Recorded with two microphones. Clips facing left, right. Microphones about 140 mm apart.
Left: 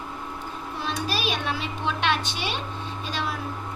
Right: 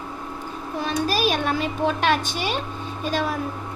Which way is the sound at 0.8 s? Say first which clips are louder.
Right 6 dB; 45° right (ahead or behind).